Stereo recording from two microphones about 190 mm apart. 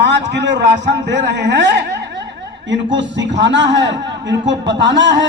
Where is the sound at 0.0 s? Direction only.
65° right (ahead or behind).